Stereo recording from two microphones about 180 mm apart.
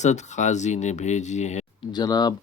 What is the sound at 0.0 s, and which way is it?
Speech, 40° left (ahead or behind).